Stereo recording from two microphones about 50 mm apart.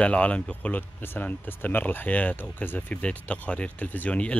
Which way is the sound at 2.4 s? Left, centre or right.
Left.